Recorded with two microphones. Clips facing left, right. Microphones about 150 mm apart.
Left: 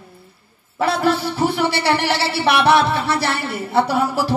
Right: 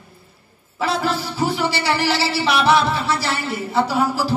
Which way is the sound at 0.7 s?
60° left (ahead or behind).